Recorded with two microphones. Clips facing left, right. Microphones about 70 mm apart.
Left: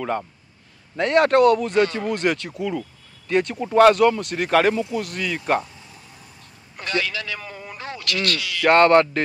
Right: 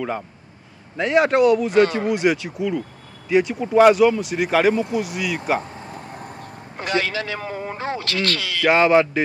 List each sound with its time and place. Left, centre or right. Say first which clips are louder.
0.9 s speech: left 1 dB; centre
5.6 s vehicle: right 3 dB; right
6.8 s speech: right 3 dB; right
8.6 s speech: left 1 dB; centre